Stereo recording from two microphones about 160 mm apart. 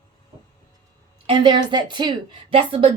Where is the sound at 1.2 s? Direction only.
30° right (ahead or behind).